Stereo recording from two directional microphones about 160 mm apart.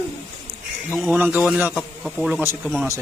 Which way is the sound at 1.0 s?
10° right (ahead or behind).